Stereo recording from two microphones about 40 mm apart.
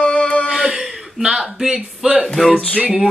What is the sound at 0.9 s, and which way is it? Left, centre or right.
Chuckle, centre.